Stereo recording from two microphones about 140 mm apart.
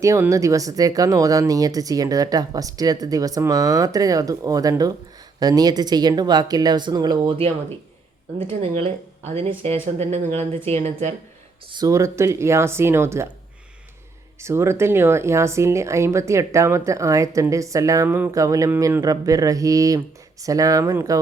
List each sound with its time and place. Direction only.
0.0 s speech: 20° right (ahead or behind); by 11.1 s 55° right (ahead or behind)
11.7 s speech: 25° right (ahead or behind)
14.3 s speech: 20° right (ahead or behind)